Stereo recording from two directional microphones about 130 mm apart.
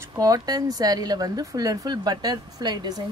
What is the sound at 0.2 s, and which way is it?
Speech, 30° right (ahead or behind).